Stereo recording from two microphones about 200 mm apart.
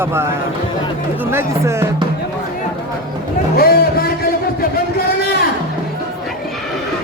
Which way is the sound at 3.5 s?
50° left (ahead or behind).